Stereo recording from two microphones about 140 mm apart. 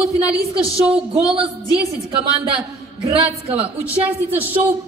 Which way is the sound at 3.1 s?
40° right (ahead or behind).